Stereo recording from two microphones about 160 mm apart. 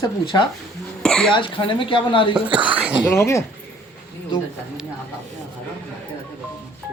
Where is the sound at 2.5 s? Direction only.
30° right (ahead or behind).